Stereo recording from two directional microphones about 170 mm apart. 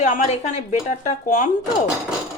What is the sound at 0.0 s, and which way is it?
Speech, 45° left (ahead or behind).